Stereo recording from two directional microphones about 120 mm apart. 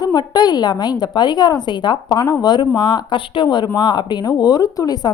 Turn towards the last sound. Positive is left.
turn(degrees=30)  # may be behind; listen again after turning